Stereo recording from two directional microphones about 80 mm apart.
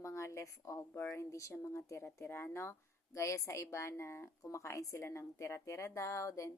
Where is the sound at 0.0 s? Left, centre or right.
Left.